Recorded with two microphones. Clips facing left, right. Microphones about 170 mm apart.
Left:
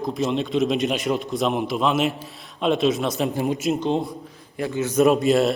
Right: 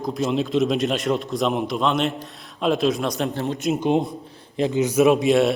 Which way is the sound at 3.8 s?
15° right (ahead or behind).